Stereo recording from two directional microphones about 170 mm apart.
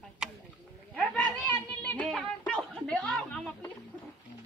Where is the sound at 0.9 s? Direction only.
5° left (ahead or behind).